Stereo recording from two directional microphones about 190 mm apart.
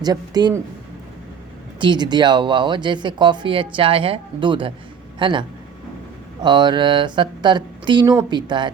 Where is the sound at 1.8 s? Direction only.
25° right (ahead or behind).